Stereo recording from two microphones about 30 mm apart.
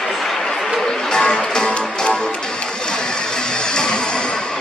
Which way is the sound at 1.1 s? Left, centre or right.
Left.